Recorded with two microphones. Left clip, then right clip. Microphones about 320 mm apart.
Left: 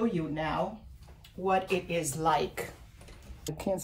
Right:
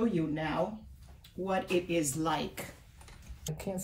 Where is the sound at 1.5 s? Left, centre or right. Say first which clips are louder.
Left 3 dB; centre.